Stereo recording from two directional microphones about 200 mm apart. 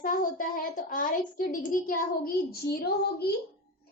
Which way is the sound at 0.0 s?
45° left (ahead or behind).